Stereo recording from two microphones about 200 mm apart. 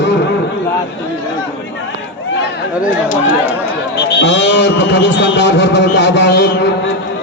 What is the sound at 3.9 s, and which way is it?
A man's voice, 60° left (ahead or behind).